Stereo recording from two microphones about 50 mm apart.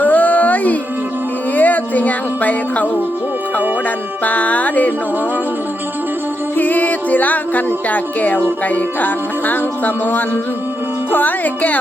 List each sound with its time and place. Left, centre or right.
0.0 s music: left
4.2 s music: left
6.6 s music: left